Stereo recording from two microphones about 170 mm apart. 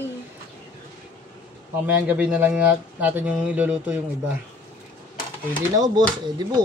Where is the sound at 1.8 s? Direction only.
10° right (ahead or behind).